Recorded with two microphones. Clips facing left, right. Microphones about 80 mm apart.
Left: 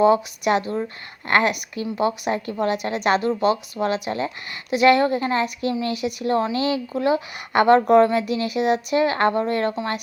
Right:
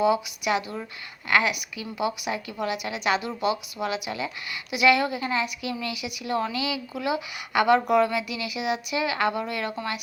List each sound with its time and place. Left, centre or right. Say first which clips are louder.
0.0 s a woman's voice: left 6 dB; left